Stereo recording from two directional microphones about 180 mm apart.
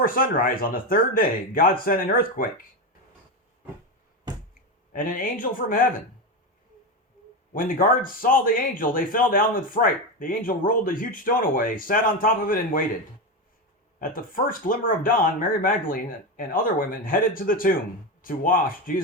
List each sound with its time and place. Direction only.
0.0 s speech: 50° left (ahead or behind)
4.3 s finger snapping: 20° right (ahead or behind)
4.9 s speech: 50° left (ahead or behind)
7.5 s speech: 50° left (ahead or behind)
14.0 s speech: 50° left (ahead or behind)